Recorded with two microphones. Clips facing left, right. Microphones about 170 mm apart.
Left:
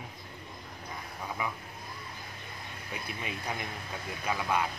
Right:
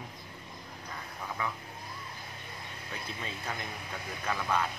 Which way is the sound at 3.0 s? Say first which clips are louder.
Left 2 dB; 15° left (ahead or behind).